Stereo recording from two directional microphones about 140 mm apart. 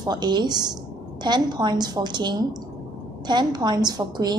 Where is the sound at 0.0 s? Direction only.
30° right (ahead or behind).